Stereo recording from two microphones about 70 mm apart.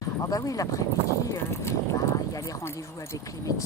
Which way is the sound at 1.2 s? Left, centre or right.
Left.